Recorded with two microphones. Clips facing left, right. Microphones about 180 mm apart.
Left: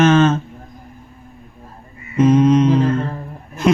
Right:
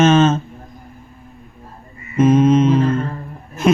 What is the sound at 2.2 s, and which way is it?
Speech, 25° right (ahead or behind).